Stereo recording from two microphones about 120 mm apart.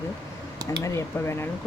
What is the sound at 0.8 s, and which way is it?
Speech, 20° left (ahead or behind).